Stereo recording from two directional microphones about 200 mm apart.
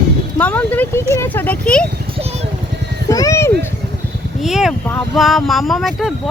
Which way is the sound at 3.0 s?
15° left (ahead or behind).